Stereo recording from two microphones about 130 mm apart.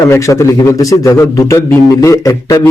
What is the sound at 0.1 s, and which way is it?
A man's voice, 20° left (ahead or behind).